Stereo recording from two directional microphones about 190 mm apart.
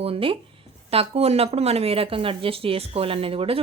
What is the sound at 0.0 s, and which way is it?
Speech, 30° right (ahead or behind).